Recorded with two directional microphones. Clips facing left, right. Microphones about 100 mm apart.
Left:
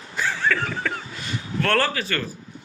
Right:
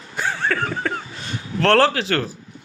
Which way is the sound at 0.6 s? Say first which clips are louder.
Right 3 dB; 35° right (ahead or behind).